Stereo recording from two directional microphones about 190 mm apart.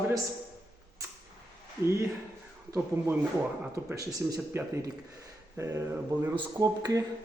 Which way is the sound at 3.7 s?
15° right (ahead or behind).